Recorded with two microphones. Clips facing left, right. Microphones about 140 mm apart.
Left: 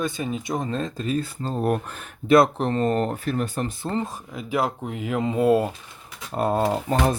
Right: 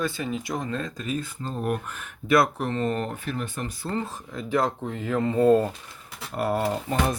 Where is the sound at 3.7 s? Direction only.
20° left (ahead or behind).